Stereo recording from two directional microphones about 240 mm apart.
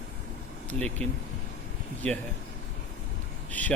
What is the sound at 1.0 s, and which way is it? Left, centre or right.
A man's voice, centre.